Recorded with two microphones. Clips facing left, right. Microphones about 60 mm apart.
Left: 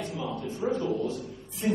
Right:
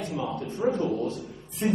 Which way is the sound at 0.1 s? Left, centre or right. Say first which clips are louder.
Right 2 dB; right.